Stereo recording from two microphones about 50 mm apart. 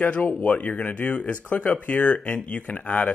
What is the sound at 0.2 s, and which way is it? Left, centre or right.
Speech, left.